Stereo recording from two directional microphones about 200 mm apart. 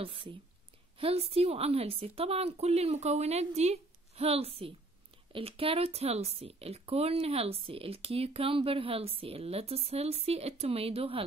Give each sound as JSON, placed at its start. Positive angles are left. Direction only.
{"t": 0.0, "sound": "a woman's voice", "side_deg": -25}